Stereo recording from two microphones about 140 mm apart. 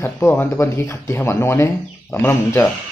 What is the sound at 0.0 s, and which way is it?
A man's voice, 15° left (ahead or behind).